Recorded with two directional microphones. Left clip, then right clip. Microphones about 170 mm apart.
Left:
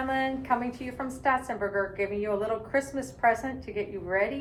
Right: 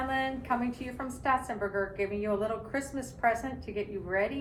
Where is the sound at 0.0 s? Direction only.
10° left (ahead or behind).